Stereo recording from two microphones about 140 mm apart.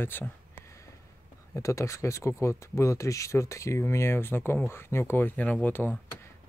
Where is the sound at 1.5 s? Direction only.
20° left (ahead or behind).